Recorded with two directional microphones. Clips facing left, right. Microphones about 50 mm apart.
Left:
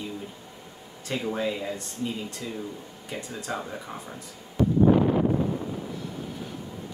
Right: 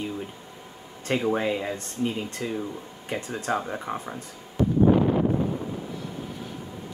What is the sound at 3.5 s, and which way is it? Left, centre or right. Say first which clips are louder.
Speech: right 5 dB; right.